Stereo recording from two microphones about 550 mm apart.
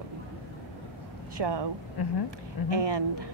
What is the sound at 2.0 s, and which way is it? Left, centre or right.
Speech, left.